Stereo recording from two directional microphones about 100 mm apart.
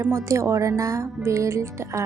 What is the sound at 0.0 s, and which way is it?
Speech, 30° right (ahead or behind).